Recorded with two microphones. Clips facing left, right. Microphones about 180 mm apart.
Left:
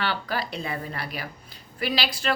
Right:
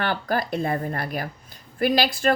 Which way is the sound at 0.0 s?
50° right (ahead or behind).